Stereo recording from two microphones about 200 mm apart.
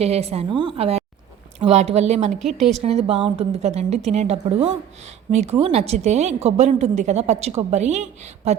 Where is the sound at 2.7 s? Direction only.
30° right (ahead or behind).